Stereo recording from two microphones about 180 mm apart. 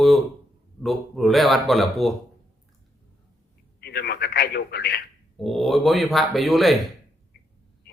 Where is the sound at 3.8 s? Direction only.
65° left (ahead or behind).